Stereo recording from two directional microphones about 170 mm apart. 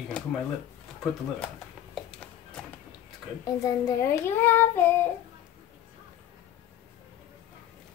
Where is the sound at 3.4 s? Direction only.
20° left (ahead or behind).